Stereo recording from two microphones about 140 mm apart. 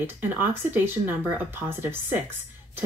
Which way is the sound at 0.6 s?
15° right (ahead or behind).